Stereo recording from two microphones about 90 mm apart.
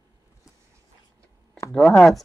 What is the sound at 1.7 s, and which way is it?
Speech, 10° left (ahead or behind).